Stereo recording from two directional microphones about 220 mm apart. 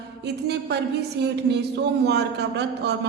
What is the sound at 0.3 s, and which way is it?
Speech, 50° right (ahead or behind).